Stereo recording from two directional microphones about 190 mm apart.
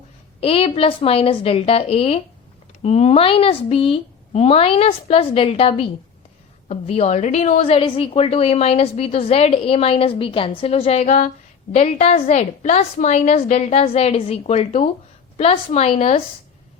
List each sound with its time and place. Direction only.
0.3 s a woman's voice: 30° left (ahead or behind)